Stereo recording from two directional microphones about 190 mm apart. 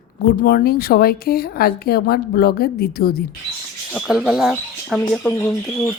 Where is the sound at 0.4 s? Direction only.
55° left (ahead or behind).